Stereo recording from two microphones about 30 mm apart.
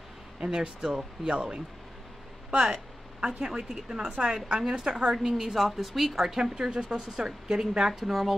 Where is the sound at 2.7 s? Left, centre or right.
Centre.